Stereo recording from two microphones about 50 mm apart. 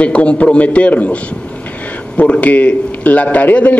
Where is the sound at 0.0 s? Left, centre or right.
Left.